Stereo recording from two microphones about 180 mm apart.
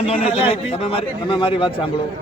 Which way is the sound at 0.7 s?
35° left (ahead or behind).